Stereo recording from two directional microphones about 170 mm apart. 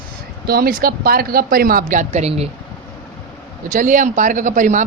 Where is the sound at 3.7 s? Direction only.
50° right (ahead or behind).